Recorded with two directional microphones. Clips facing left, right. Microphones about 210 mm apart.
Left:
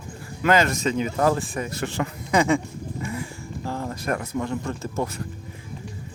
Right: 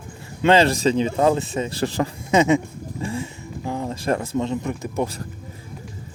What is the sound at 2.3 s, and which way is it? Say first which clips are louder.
Speech: right 3 dB; 20° right (ahead or behind).